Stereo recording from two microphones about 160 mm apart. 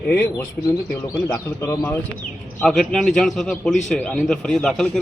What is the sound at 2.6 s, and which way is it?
A man's voice, 5° left (ahead or behind).